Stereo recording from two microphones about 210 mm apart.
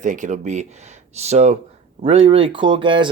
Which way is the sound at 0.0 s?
35° right (ahead or behind).